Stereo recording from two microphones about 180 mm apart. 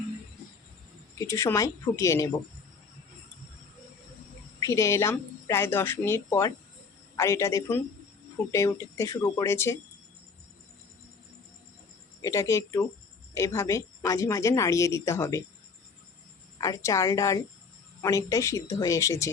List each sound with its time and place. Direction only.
1.2 s a woman's voice: 15° left (ahead or behind)
4.6 s a woman's voice: 15° left (ahead or behind)
12.2 s a woman's voice: 15° left (ahead or behind)
16.6 s a woman's voice: 15° left (ahead or behind)